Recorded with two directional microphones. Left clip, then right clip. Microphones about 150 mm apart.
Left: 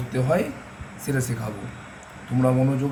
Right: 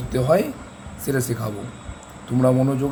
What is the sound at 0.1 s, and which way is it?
Speech, 90° right.